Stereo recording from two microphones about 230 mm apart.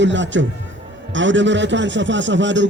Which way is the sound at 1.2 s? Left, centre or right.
Right.